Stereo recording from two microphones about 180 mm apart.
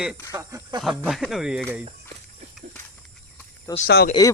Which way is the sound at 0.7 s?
25° right (ahead or behind).